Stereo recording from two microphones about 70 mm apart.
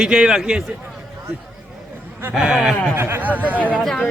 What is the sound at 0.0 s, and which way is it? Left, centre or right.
Speech, centre.